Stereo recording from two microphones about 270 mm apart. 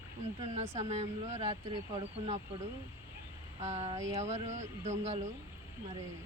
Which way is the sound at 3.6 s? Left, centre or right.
Right.